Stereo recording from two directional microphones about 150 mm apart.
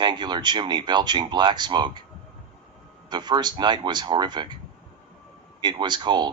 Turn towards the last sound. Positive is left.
turn(degrees=-30)  # may be behind; listen again after turning